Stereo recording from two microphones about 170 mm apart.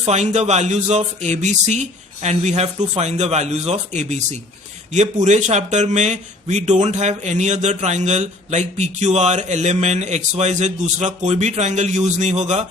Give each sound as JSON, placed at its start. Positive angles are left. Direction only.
{"t": 0.0, "sound": "speech", "side_deg": -40}